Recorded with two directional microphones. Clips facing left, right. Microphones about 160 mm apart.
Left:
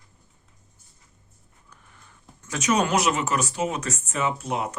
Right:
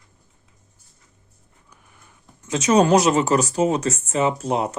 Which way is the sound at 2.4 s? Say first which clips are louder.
Right 7 dB; 25° right (ahead or behind).